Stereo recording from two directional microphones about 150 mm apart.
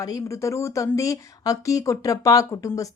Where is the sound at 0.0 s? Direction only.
20° left (ahead or behind).